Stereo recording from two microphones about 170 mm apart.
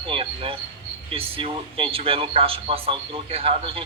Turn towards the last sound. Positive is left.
turn(degrees=-35)  # may be behind; listen again after turning